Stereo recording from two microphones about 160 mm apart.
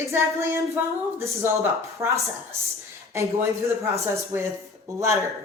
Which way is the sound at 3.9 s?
15° right (ahead or behind).